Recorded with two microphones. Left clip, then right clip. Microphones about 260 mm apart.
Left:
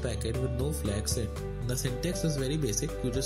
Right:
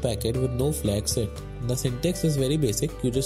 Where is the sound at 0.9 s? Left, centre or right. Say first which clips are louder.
Right 6 dB; centre.